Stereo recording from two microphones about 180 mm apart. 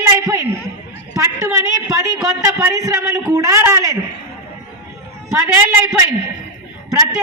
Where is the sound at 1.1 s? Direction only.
15° right (ahead or behind).